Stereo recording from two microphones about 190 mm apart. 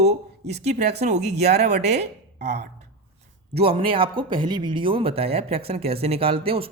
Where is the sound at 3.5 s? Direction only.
30° right (ahead or behind).